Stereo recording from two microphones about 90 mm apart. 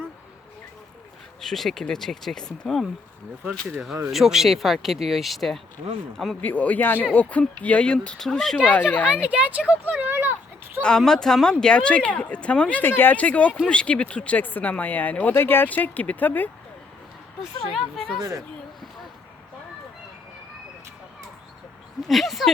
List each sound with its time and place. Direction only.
1.4 s speech: 5° left (ahead or behind)
4.1 s speech: 5° right (ahead or behind)
6.4 s speech: 15° left (ahead or behind)
8.6 s speech: 20° left (ahead or behind)
9.2 s speech: 15° right (ahead or behind)
10.8 s speech: 5° left (ahead or behind)
17.7 s speech: centre (ahead or behind)
18.2 s speech: 40° right (ahead or behind)
22.0 s speech: centre (ahead or behind)